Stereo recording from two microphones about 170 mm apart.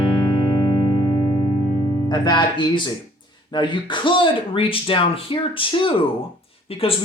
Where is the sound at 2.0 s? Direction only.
25° left (ahead or behind).